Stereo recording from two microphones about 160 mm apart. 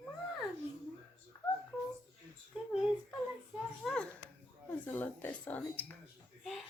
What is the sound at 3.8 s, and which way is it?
Speech, centre (ahead or behind).